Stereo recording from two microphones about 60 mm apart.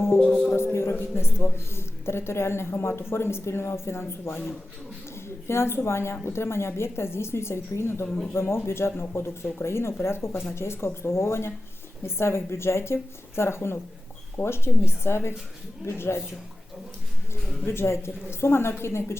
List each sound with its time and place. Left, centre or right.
0.2 s music: centre
0.5 s a sound: left
1.5 s a woman's voice: left
8.0 s speech: centre
8.3 s a woman's voice: left
17.7 s a woman's voice: left